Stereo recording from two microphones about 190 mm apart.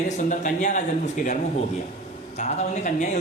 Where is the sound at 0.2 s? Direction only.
40° left (ahead or behind).